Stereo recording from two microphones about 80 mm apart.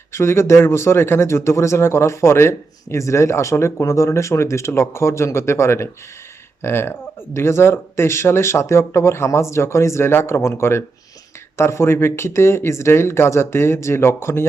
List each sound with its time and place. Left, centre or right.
0.1 s speech: left